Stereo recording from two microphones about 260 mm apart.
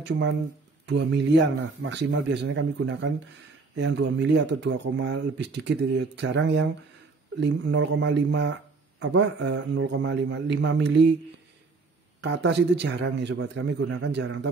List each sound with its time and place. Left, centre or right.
0.8 s speech: right
12.2 s speech: right